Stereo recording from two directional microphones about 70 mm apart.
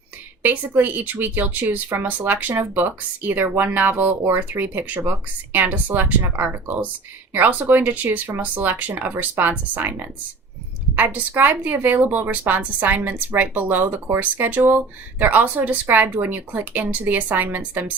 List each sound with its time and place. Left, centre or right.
0.8 s speech: right
10.9 s speech: right